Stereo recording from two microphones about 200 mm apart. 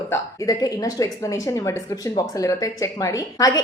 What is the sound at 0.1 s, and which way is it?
A woman's voice, 20° left (ahead or behind).